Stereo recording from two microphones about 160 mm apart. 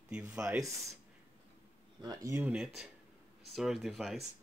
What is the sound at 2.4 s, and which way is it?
Speech, 5° right (ahead or behind).